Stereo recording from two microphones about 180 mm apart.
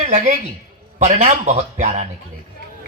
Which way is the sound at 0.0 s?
40° right (ahead or behind).